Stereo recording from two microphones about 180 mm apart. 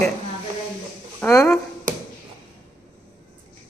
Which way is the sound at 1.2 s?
10° left (ahead or behind).